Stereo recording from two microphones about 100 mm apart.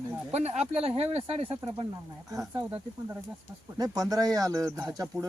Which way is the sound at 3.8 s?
35° right (ahead or behind).